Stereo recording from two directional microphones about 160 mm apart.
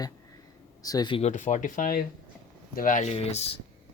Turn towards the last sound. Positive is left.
turn(degrees=40)  # may be behind; listen again after turning